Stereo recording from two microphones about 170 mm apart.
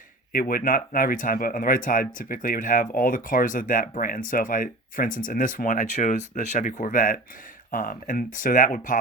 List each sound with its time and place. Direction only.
0.3 s speech: 55° left (ahead or behind)